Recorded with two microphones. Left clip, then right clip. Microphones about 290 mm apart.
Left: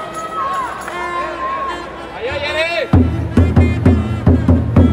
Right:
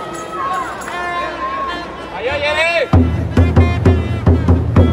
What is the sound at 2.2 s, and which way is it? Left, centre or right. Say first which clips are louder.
Music: right 3 dB; centre.